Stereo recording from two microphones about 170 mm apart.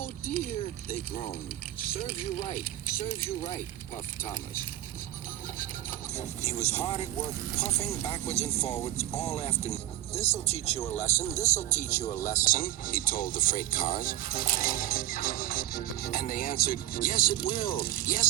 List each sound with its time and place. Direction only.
0.6 s speech: 50° left (ahead or behind)
5.5 s a sound: 45° left (ahead or behind)
7.9 s speech: 20° left (ahead or behind)
8.3 s speech: 40° left (ahead or behind); by 18.3 s 55° left (ahead or behind)